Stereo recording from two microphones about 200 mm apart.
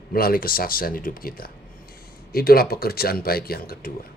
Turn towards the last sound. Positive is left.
turn(degrees=50)  # may be behind; listen again after turning